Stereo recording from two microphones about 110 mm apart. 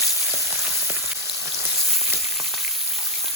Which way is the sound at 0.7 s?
25° right (ahead or behind).